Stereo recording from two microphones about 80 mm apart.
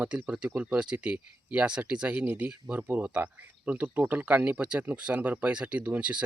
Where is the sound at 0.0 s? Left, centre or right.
Centre.